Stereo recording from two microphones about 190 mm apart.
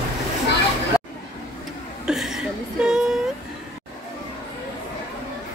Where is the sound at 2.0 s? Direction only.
Centre (ahead or behind).